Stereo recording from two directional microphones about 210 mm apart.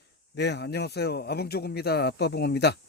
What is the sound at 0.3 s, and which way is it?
Speech, 55° left (ahead or behind).